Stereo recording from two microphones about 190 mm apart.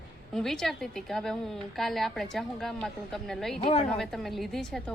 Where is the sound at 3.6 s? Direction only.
30° left (ahead or behind).